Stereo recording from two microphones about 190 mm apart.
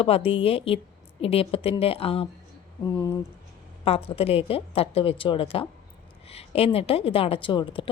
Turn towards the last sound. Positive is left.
turn(degrees=25)  # may be behind; listen again after turning